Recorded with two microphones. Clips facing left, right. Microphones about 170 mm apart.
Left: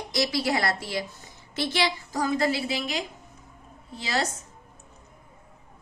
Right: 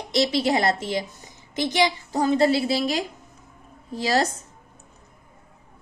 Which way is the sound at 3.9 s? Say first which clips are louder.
Right 7 dB; 40° right (ahead or behind).